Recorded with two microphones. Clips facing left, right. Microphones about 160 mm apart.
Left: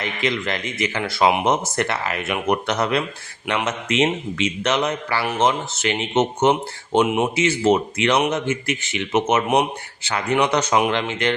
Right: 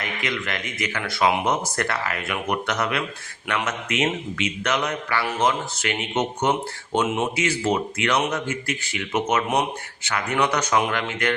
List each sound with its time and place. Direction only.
0.0 s speech: 30° left (ahead or behind)